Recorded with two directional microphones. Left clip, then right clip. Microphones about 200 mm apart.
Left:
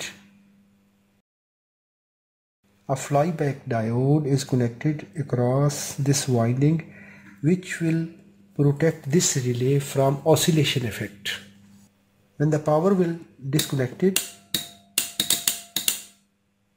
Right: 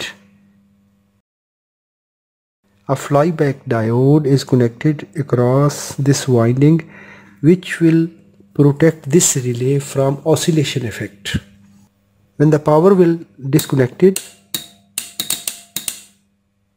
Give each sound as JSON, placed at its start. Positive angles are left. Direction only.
{"t": 2.9, "sound": "speech", "side_deg": -40}